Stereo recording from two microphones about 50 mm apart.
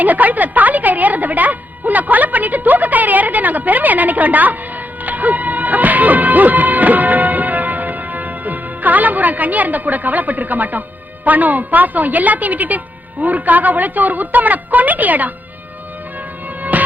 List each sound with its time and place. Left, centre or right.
0.0 s a woman's voice: right
5.0 s music: right
11.3 s a woman's voice: right
16.7 s music: right